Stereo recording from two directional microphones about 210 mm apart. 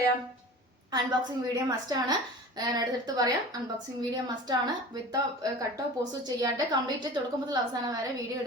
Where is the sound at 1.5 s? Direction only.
15° right (ahead or behind).